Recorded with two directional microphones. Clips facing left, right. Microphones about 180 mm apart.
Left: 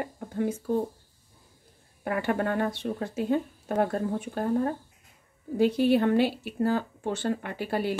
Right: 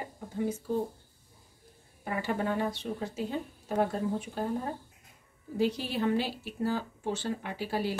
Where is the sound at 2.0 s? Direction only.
65° left (ahead or behind).